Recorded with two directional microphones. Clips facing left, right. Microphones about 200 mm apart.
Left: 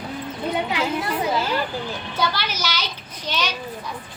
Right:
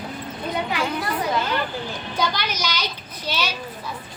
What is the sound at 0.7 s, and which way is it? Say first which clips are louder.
Speech: left 1 dB; 25° left (ahead or behind).